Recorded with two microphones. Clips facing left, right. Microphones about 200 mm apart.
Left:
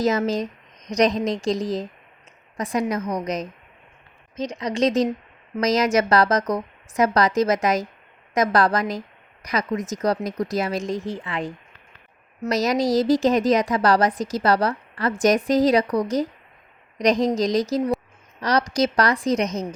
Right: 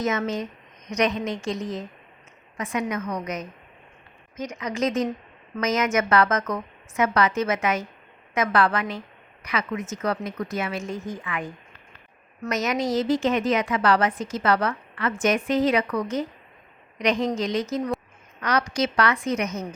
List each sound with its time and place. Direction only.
0.0 s a woman's voice: 35° left (ahead or behind)
4.4 s a woman's voice: 30° left (ahead or behind)
12.5 s a woman's voice: 35° left (ahead or behind)